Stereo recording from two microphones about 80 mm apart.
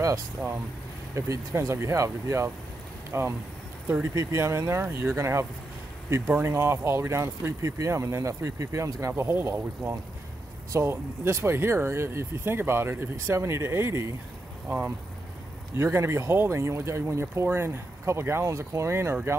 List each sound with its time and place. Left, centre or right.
1.1 s speech: right
15.7 s speech: right